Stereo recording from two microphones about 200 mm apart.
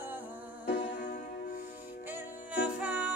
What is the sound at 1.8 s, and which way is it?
Music, 10° right (ahead or behind).